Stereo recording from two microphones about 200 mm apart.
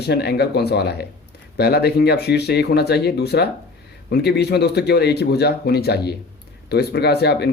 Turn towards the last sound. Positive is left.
turn(degrees=55)  # may be behind; listen again after turning